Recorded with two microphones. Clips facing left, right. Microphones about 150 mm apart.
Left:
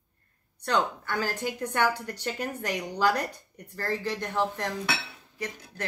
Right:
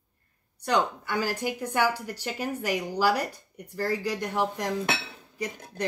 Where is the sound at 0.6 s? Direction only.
10° right (ahead or behind).